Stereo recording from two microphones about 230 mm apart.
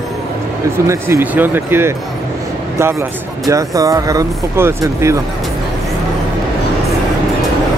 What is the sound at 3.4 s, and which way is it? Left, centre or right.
Speech, centre.